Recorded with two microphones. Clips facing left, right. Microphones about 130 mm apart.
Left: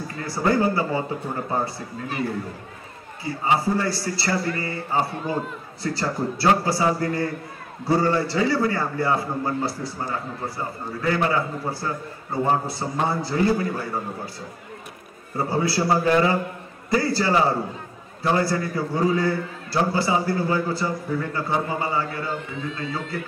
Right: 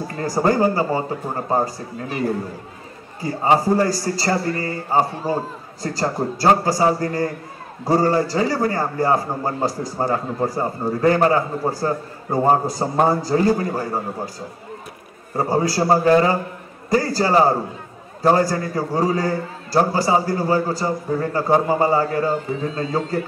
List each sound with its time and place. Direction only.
0.1 s a man's voice: 40° right (ahead or behind)
15.3 s a man's voice: 40° right (ahead or behind)